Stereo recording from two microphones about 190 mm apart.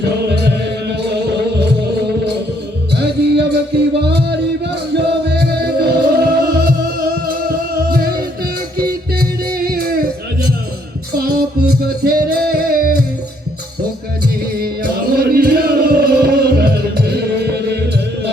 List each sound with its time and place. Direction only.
1.0 s music: 60° right (ahead or behind)
2.9 s music: 60° right (ahead or behind)
9.6 s music: 50° right (ahead or behind)
14.6 s music: 55° right (ahead or behind)